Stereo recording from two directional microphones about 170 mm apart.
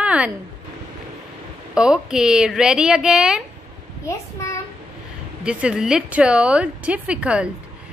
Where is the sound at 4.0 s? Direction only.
15° left (ahead or behind).